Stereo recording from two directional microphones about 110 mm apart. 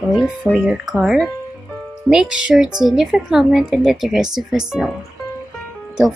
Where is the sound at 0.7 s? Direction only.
5° right (ahead or behind).